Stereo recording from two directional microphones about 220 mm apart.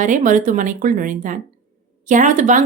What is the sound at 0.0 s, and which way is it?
A woman's voice, 35° right (ahead or behind).